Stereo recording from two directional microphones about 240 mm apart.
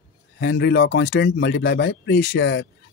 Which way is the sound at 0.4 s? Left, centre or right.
Left.